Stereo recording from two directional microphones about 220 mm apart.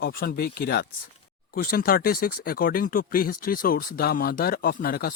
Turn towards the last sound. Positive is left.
turn(degrees=40)  # may be behind; listen again after turning